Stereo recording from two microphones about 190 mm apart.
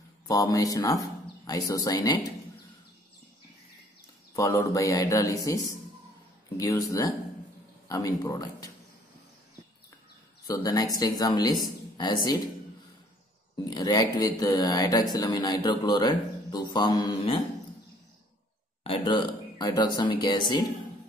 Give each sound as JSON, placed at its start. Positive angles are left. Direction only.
{"t": 0.3, "sound": "speech", "side_deg": 20}
{"t": 4.3, "sound": "speech", "side_deg": 15}
{"t": 10.4, "sound": "speech", "side_deg": 20}
{"t": 13.7, "sound": "speech", "side_deg": 20}
{"t": 18.9, "sound": "speech", "side_deg": 25}